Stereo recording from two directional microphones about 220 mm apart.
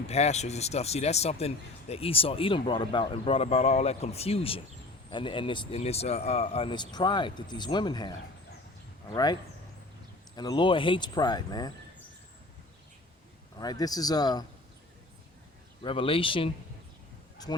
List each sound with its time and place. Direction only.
0.1 s speech: 30° left (ahead or behind)
9.1 s a man's voice: 15° left (ahead or behind)
13.6 s a man's voice: 15° left (ahead or behind)
15.8 s speech: 25° left (ahead or behind)